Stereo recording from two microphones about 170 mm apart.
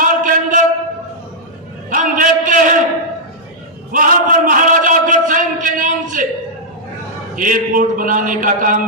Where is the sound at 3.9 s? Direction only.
55° right (ahead or behind).